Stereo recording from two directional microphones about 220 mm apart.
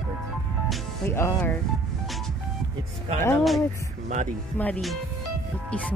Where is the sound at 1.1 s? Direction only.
10° left (ahead or behind).